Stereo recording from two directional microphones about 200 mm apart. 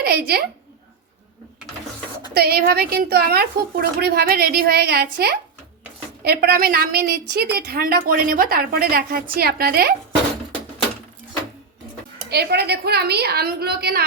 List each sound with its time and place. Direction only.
0.0 s a woman's voice: 50° right (ahead or behind)
2.3 s a woman's voice: 50° right (ahead or behind)
12.3 s a woman's voice: 55° right (ahead or behind)